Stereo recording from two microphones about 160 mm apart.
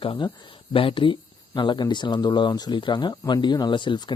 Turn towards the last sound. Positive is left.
turn(degrees=30)  # may be behind; listen again after turning